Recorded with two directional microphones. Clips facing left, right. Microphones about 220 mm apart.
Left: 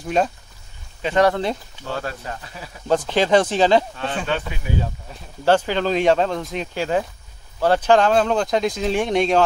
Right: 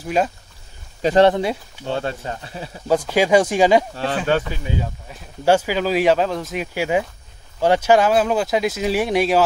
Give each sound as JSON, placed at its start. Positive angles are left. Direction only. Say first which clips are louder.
{"t": 0.0, "sound": "speech", "louder": "even", "side_deg": -5}
{"t": 1.0, "sound": "speech", "louder": "right 4 dB", "side_deg": -35}
{"t": 1.3, "sound": "speech", "louder": "right 2 dB", "side_deg": -10}
{"t": 1.9, "sound": "speech", "louder": "right 4 dB", "side_deg": -25}
{"t": 2.9, "sound": "speech", "louder": "right 1 dB", "side_deg": -10}
{"t": 3.9, "sound": "speech", "louder": "right 4 dB", "side_deg": -35}
{"t": 4.7, "sound": "speech", "louder": "left 2 dB", "side_deg": -20}